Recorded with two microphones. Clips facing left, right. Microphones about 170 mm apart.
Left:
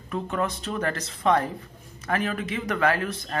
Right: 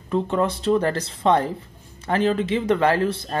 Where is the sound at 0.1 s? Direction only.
30° right (ahead or behind).